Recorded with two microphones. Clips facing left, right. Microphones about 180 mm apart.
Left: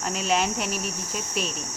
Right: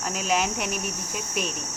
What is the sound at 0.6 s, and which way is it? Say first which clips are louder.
Speech: even; 55° right (ahead or behind).